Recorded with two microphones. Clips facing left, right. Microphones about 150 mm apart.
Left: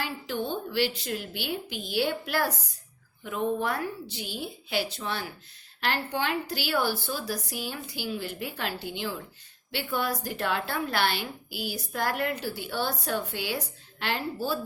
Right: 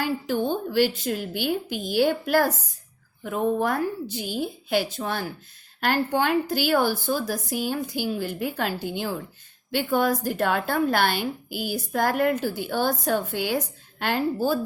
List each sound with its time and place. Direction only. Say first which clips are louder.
0.0 s a woman's voice: right 7 dB; 45° right (ahead or behind)